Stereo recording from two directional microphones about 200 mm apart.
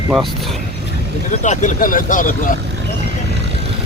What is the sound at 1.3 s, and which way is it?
Speech, 40° left (ahead or behind).